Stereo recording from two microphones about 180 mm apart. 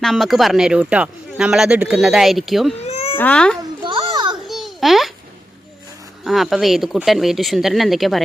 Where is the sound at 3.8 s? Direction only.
25° right (ahead or behind).